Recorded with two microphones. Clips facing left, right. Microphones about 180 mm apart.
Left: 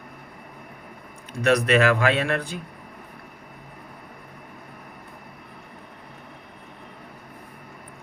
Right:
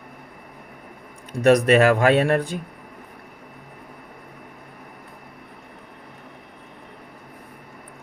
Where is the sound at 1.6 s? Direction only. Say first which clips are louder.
Right 4 dB; 45° right (ahead or behind).